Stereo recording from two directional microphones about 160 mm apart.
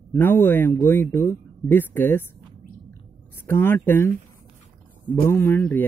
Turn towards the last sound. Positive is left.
turn(degrees=10)  # may be behind; listen again after turning